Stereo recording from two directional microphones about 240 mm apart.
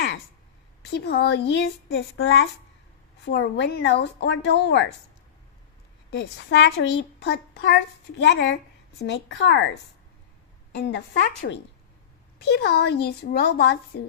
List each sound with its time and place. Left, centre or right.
0.9 s a woman's voice: left
6.1 s a woman's voice: left
10.7 s a woman's voice: left